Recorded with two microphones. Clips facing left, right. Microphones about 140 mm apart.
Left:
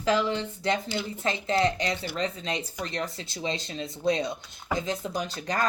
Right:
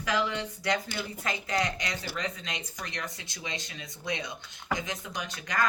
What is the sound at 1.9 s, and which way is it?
Speech, 40° right (ahead or behind).